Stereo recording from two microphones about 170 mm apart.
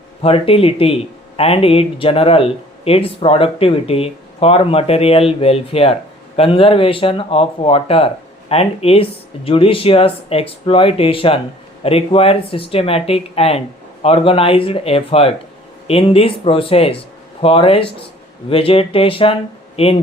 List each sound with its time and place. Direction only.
0.2 s speech: 35° left (ahead or behind)